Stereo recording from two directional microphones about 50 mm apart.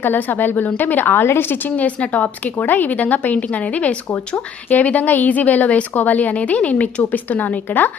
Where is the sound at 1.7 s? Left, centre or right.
Left.